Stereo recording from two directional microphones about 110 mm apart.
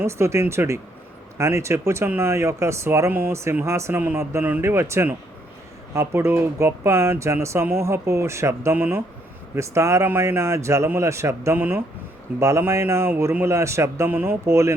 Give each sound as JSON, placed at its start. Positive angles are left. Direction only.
{"t": 0.0, "sound": "speech", "side_deg": -25}